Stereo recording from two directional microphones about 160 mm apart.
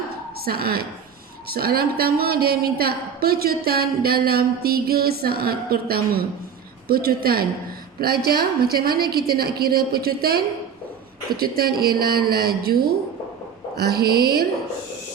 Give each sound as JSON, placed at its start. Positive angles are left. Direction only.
{"t": 0.4, "sound": "a woman's voice", "side_deg": -70}
{"t": 13.7, "sound": "a woman's voice", "side_deg": -75}